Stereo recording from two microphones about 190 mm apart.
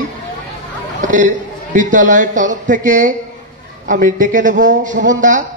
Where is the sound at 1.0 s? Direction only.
40° right (ahead or behind).